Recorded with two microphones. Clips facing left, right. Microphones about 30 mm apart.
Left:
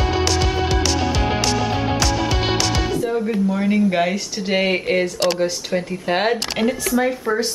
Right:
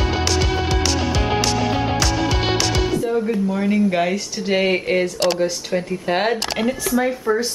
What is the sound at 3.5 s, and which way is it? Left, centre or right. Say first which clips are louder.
Speech: left 2 dB; centre.